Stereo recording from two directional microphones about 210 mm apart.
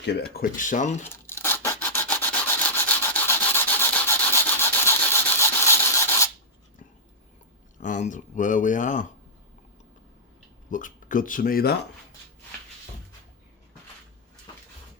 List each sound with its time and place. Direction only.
0.0 s speech: 50° left (ahead or behind); by 1.0 s 35° left (ahead or behind)
1.0 s rub: 10° left (ahead or behind)
7.8 s speech: 35° left (ahead or behind)
10.7 s speech: 40° left (ahead or behind)